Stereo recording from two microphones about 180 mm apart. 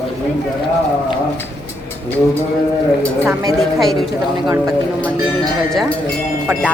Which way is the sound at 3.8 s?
Centre (ahead or behind).